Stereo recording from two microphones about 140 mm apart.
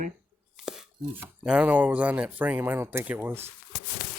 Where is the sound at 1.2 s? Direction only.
10° right (ahead or behind).